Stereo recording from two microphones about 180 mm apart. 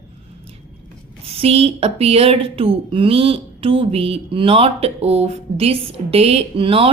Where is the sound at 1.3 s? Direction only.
35° right (ahead or behind).